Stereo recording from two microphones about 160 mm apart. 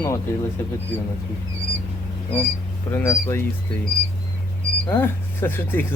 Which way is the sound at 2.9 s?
15° left (ahead or behind).